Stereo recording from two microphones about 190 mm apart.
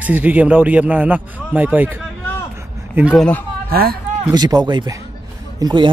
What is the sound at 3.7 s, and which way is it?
Speech, 50° right (ahead or behind).